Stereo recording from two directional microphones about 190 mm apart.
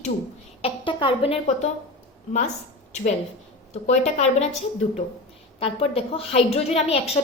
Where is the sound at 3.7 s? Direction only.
35° left (ahead or behind).